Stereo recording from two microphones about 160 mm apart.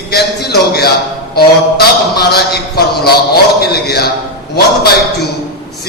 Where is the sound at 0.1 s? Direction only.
80° left.